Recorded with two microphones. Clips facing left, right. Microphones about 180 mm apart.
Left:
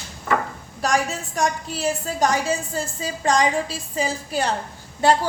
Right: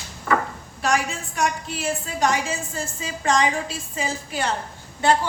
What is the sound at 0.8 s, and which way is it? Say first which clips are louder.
A woman's voice: left 1 dB; 40° left (ahead or behind).